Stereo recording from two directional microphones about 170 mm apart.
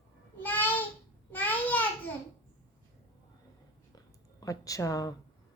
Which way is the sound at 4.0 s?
20° left (ahead or behind).